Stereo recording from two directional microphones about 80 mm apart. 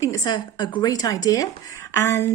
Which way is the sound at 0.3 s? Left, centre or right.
Left.